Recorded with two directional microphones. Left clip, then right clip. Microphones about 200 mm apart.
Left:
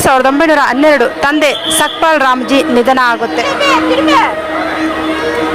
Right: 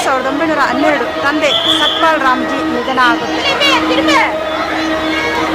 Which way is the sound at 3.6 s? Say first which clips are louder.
Left 3 dB; 20° left (ahead or behind).